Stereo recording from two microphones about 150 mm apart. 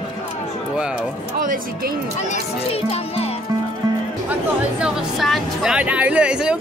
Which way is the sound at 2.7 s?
40° left (ahead or behind).